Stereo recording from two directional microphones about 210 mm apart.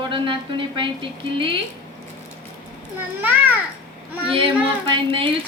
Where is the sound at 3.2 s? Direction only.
10° right (ahead or behind).